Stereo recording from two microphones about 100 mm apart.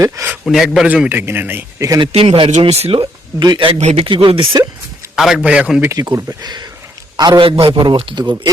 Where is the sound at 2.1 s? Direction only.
80° right; by 4.6 s 65° right (ahead or behind).